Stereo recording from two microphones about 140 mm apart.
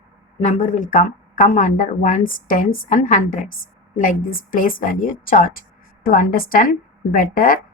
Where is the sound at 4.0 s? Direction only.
85° left.